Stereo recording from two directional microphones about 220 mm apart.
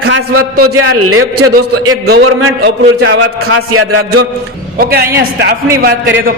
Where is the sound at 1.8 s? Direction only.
50° right (ahead or behind).